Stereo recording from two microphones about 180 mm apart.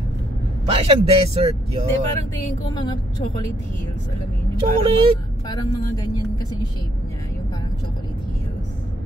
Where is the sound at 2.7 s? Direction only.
25° left (ahead or behind).